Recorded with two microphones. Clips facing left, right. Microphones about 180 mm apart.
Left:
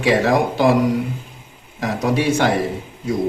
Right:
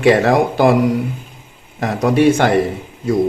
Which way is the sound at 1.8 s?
55° right (ahead or behind).